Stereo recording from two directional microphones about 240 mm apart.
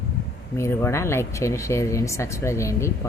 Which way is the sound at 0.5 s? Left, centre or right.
Centre.